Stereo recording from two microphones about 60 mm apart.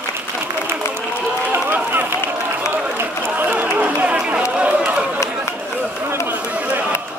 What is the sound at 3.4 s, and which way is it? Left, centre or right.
Chatter, right.